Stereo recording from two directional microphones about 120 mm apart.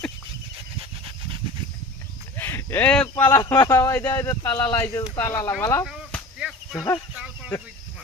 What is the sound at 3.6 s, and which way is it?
Speech, 20° left (ahead or behind).